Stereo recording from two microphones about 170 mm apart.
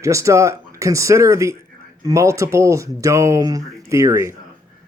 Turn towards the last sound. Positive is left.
turn(degrees=-15)  # may be behind; listen again after turning